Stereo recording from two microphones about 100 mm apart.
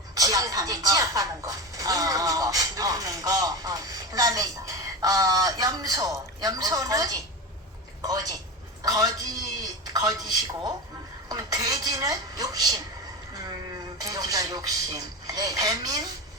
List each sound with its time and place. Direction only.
0.1 s a woman's voice: 35° right (ahead or behind)